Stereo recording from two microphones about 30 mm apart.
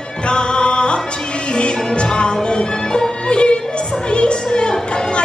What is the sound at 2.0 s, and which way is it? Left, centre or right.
Music, left.